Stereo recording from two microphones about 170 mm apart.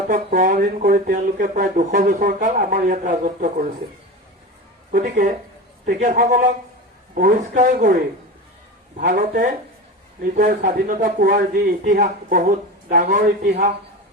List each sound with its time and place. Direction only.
0.1 s speech: 50° right (ahead or behind)
4.9 s speech: 55° right (ahead or behind)
9.1 s speech: 55° right (ahead or behind)